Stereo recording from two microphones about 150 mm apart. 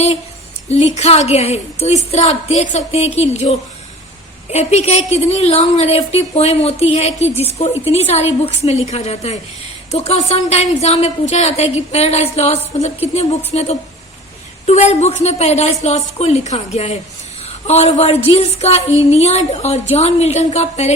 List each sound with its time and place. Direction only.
0.7 s a woman's voice: 45° left (ahead or behind)